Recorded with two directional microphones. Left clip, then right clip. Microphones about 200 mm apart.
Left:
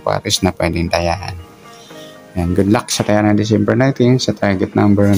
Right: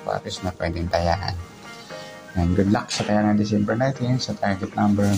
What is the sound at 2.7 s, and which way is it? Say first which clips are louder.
Speech: left 8 dB; 45° left (ahead or behind).